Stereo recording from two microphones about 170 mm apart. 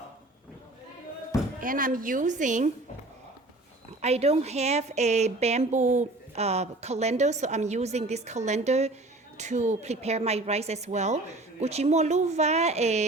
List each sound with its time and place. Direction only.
1.6 s a woman's voice: 55° right (ahead or behind)
4.0 s a woman's voice: 40° right (ahead or behind)